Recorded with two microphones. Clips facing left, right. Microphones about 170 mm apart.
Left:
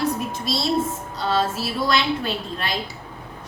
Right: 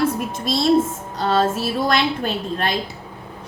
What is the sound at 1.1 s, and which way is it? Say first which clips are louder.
Music: right 4 dB; 50° right (ahead or behind).